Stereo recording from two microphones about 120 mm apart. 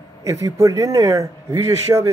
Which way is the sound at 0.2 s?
25° right (ahead or behind).